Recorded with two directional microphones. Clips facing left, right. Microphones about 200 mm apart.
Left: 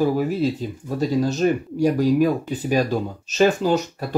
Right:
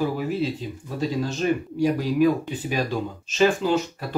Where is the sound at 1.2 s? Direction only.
40° left (ahead or behind).